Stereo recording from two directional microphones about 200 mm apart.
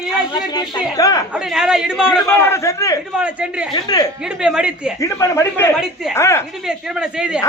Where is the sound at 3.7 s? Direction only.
20° left (ahead or behind).